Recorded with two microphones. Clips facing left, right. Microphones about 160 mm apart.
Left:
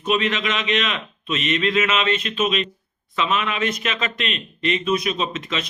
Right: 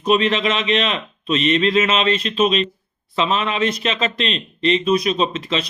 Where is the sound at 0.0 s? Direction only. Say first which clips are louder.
Right 5 dB; 35° right (ahead or behind).